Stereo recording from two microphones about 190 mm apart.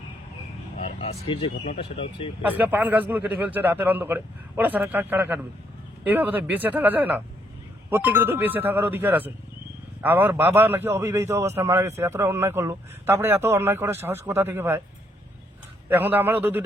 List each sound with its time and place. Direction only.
0.9 s speech: 30° left (ahead or behind)
2.5 s a man's voice: 10° right (ahead or behind)
15.9 s a man's voice: 10° right (ahead or behind)